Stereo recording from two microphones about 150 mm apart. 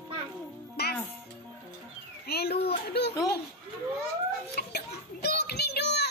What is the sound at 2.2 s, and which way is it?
Speech, 90° left.